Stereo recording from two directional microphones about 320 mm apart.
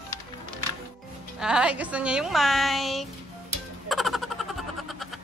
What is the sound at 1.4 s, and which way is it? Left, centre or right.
Speech, centre.